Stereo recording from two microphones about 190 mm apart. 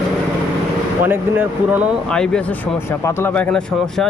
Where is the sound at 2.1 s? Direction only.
5° left (ahead or behind).